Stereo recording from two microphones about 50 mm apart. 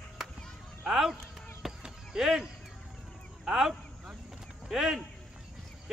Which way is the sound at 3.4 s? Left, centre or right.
Centre.